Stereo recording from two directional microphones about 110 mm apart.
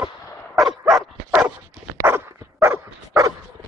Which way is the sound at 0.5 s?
Centre (ahead or behind).